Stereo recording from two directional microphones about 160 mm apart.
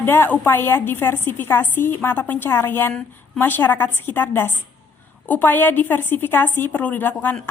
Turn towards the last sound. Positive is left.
turn(degrees=10)  # may be behind; listen again after turning